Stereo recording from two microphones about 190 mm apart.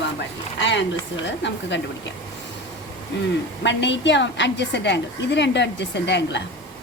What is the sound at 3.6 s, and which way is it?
A woman's voice, 70° left (ahead or behind).